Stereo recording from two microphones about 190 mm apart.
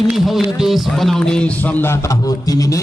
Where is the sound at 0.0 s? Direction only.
Centre (ahead or behind).